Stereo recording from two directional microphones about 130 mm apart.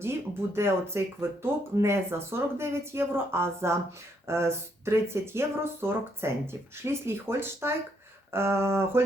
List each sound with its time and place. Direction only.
0.0 s speech: 20° right (ahead or behind)